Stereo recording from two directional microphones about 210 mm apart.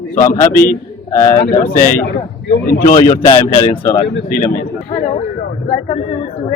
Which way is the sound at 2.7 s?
40° left (ahead or behind).